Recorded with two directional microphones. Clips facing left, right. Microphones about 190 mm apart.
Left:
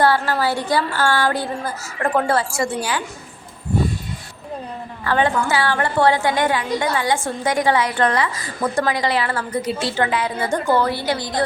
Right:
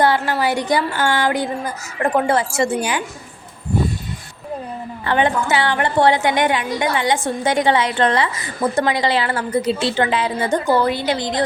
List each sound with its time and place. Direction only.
0.0 s a woman's voice: 15° right (ahead or behind)
5.0 s a woman's voice: 20° right (ahead or behind)